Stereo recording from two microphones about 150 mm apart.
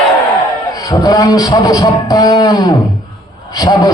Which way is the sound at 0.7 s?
25° left (ahead or behind).